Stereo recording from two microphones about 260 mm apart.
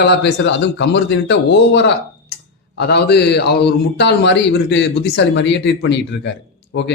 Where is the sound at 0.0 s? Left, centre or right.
Left.